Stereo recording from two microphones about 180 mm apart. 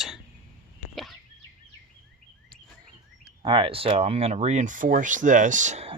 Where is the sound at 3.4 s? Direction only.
30° right (ahead or behind).